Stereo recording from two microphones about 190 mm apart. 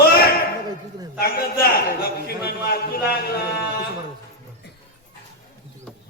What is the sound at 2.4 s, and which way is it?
Speech, 55° left (ahead or behind).